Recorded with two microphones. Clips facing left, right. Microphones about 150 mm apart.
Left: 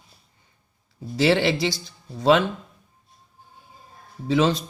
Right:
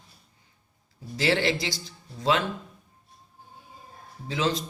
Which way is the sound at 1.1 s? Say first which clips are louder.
Left 5 dB; 65° left (ahead or behind).